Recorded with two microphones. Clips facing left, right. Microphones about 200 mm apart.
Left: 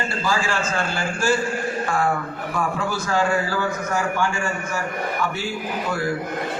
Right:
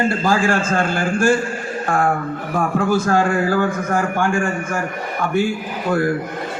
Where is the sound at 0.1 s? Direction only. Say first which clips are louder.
Right 6 dB; 50° right (ahead or behind).